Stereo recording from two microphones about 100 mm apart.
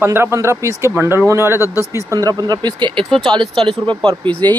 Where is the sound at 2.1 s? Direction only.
35° right (ahead or behind).